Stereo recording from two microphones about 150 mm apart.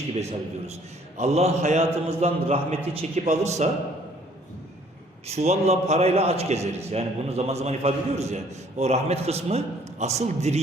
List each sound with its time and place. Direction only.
0.1 s a man's voice: 45° right (ahead or behind)
5.2 s a man's voice: 45° right (ahead or behind)